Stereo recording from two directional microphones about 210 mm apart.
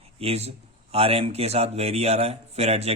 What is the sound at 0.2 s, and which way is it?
A man's voice, 30° right (ahead or behind).